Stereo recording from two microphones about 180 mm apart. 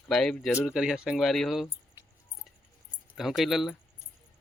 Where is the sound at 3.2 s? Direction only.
Centre (ahead or behind).